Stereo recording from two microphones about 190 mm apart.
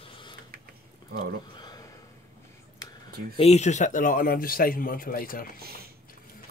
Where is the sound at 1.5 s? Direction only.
20° left (ahead or behind).